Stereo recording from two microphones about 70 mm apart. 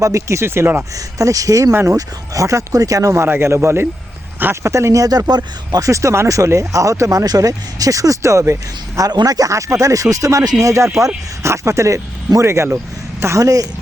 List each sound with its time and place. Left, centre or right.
0.0 s speech: right
0.9 s speech: right
1.7 s speech: right
2.0 s speech: right
3.1 s speech: right
5.0 s speech: right
5.8 s speech: right
7.3 s speech: right
9.0 s speech: right
13.4 s speech: right